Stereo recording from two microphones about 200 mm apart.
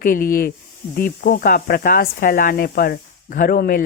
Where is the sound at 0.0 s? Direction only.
45° left (ahead or behind).